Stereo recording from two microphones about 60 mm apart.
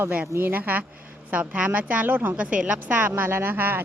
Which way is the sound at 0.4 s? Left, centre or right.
Right.